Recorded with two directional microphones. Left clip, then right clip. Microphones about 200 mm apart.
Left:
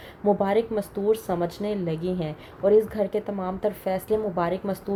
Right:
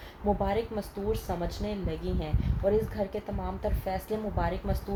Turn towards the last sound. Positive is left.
turn(degrees=40)  # may be behind; listen again after turning